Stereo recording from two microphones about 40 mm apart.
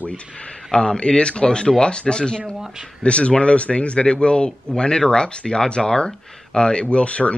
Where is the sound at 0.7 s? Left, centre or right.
Centre.